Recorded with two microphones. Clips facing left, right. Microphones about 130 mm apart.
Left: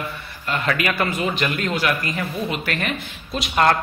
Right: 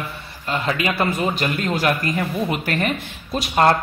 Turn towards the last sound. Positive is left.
turn(degrees=-35)  # may be behind; listen again after turning